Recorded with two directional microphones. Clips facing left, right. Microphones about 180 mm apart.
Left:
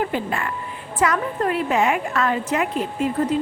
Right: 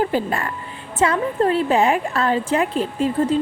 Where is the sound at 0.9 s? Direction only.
30° right (ahead or behind).